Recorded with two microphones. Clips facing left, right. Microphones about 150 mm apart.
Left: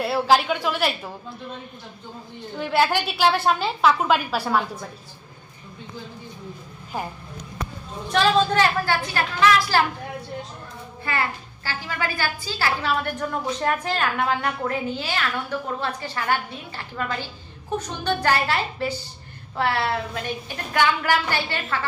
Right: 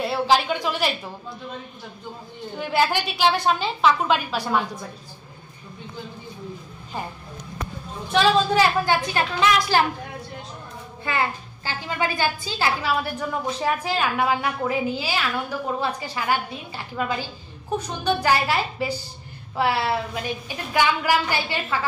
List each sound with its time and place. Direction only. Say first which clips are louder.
0.0 s a woman's voice: left 1 dB; 5° left (ahead or behind)
2.7 s a woman's voice: left 1 dB; centre (ahead or behind)
8.1 s a woman's voice: even; centre (ahead or behind)
8.8 s a woman's voice: right 2 dB; 20° right (ahead or behind)
11.1 s a woman's voice: right 2 dB; 20° right (ahead or behind)
13.0 s a woman's voice: even; 5° right (ahead or behind)